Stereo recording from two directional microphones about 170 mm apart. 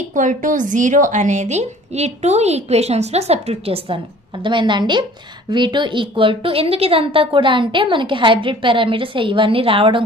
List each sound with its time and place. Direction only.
0.1 s a woman's voice: 50° right (ahead or behind); by 10.0 s 30° right (ahead or behind)